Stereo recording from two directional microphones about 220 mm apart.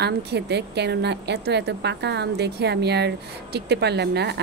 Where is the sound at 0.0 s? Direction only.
50° right (ahead or behind).